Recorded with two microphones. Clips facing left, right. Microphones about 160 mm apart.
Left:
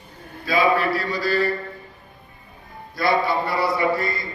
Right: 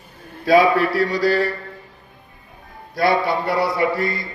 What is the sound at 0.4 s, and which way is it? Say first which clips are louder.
Music: right 5 dB; 75° right (ahead or behind).